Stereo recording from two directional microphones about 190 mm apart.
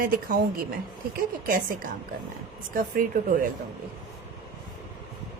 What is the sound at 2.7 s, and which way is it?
Speech, 50° right (ahead or behind).